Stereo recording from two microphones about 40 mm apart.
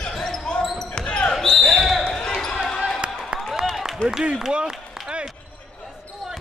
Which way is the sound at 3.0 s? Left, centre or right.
Right.